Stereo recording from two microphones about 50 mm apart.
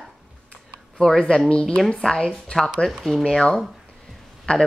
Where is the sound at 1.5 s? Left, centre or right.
Centre.